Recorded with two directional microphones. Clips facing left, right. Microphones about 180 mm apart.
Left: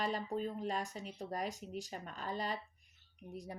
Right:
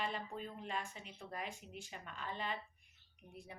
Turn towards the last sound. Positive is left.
turn(degrees=40)  # may be behind; listen again after turning